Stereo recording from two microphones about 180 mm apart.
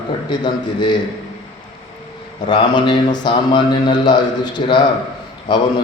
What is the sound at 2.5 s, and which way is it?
Speech, 25° left (ahead or behind).